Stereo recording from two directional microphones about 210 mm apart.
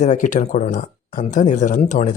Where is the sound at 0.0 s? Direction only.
35° left (ahead or behind).